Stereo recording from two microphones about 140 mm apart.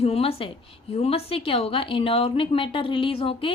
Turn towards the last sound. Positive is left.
turn(degrees=40)  # may be behind; listen again after turning